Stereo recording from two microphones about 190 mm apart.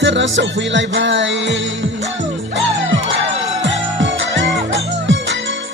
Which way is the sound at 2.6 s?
75° right (ahead or behind).